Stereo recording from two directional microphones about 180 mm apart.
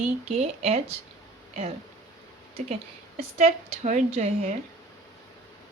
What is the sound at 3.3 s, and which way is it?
A woman's voice, 40° right (ahead or behind).